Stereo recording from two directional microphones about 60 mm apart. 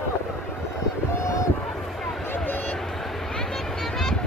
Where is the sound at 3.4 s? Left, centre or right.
Centre.